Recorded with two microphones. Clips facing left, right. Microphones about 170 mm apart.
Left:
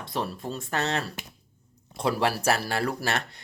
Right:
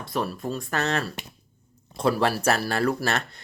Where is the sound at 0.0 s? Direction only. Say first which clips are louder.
Right 3 dB; 25° left (ahead or behind).